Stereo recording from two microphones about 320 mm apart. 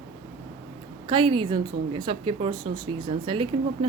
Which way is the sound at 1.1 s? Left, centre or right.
Centre.